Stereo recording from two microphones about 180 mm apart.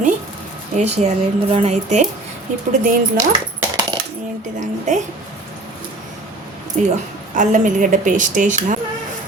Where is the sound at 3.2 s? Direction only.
20° right (ahead or behind).